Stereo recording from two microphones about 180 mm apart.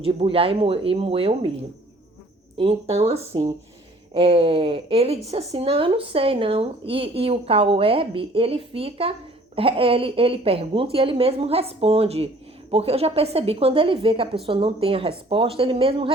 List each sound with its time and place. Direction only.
0.0 s a woman's voice: 30° right (ahead or behind)
2.6 s a woman's voice: 35° right (ahead or behind)